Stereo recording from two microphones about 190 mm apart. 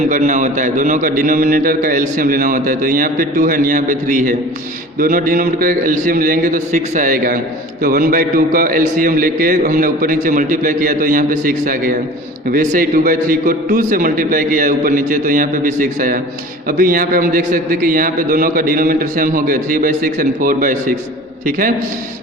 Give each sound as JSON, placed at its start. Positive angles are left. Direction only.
{"t": 0.1, "sound": "a man's voice", "side_deg": -45}